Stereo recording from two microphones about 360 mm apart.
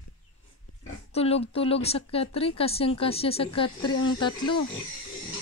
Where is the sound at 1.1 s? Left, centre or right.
Centre.